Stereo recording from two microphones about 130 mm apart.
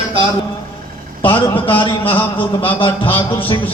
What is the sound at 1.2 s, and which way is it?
A man's voice, 40° left (ahead or behind).